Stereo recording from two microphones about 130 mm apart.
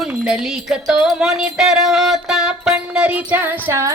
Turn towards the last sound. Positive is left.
turn(degrees=-20)  # may be behind; listen again after turning